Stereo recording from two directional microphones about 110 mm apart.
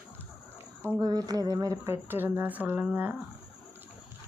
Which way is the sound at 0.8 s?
25° right (ahead or behind).